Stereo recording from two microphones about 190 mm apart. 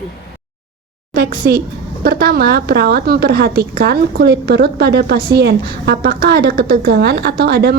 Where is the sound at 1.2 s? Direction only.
50° right (ahead or behind).